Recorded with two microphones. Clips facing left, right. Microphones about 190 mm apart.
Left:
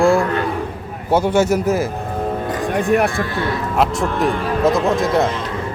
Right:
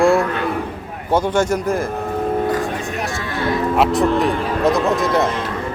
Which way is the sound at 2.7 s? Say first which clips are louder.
Left 8 dB; 55° left (ahead or behind).